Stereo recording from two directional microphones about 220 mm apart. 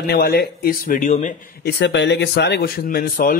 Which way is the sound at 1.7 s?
50° left (ahead or behind).